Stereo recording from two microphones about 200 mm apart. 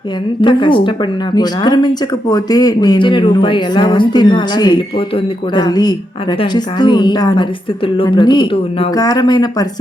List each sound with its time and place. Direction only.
0.4 s speech: 25° left (ahead or behind)